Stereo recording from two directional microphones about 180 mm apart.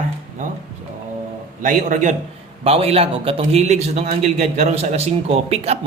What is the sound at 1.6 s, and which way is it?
Speech, 45° right (ahead or behind).